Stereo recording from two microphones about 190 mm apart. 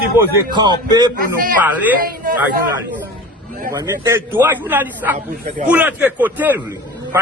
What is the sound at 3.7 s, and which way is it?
A man's voice, 15° right (ahead or behind).